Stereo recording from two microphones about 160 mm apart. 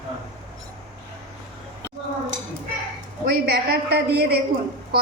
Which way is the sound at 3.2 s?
90° right.